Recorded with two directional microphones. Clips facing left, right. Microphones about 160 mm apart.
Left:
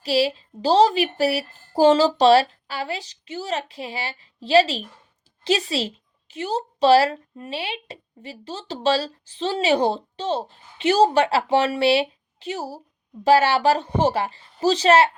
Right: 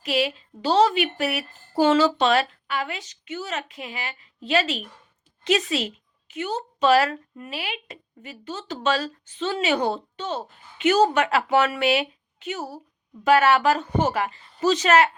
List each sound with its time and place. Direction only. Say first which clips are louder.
0.0 s a woman's voice: left 4 dB; 30° left (ahead or behind)